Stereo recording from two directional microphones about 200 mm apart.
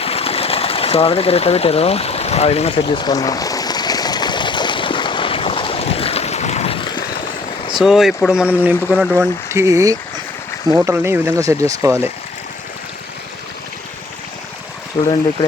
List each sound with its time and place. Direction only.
0.0 s sewing machine: 30° left (ahead or behind)
7.7 s speech: centre (ahead or behind)
9.1 s speech: 15° right (ahead or behind)
15.0 s speech: 20° left (ahead or behind)